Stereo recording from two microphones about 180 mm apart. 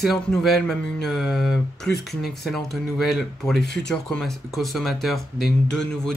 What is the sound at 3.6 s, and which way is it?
Speech, 70° left (ahead or behind).